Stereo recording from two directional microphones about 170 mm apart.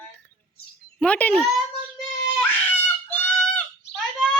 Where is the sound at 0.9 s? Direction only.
5° left (ahead or behind).